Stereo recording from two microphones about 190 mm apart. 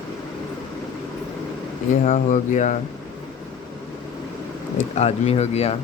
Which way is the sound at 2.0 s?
40° left (ahead or behind).